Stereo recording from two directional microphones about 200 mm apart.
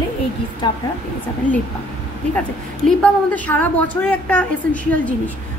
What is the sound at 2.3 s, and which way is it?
A woman's voice, 5° left (ahead or behind).